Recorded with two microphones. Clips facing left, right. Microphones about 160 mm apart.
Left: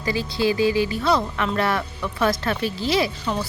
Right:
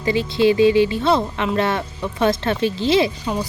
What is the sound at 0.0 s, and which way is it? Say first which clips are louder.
Speech: right 6 dB; 25° right (ahead or behind).